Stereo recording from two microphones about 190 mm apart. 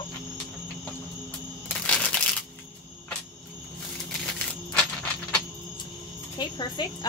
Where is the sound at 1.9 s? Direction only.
5° left (ahead or behind).